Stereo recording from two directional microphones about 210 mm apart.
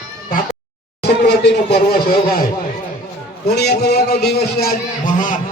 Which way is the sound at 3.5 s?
50° left (ahead or behind).